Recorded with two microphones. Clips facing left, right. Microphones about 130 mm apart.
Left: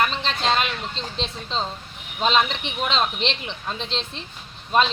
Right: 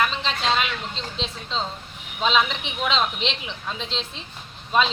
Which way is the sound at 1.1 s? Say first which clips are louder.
Left 1 dB; centre (ahead or behind).